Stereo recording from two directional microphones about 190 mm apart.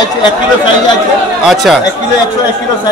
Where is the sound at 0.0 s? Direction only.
25° left (ahead or behind).